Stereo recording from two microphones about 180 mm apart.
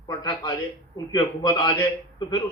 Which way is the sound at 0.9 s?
20° left (ahead or behind).